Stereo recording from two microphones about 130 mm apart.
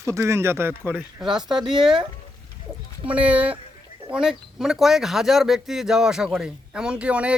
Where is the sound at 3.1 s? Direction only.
10° right (ahead or behind).